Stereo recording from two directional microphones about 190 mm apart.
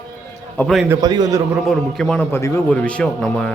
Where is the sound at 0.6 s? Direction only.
Centre (ahead or behind).